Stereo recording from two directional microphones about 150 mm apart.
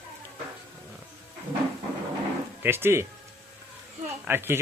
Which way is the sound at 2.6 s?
15° right (ahead or behind).